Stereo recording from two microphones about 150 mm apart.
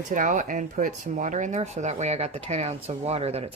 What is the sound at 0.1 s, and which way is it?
Speech, 60° right (ahead or behind).